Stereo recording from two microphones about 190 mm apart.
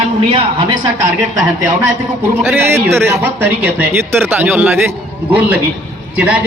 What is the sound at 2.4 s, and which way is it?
Speech, 10° right (ahead or behind).